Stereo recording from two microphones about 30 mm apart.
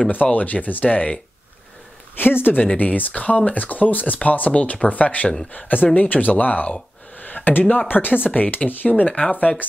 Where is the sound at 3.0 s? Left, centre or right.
Left.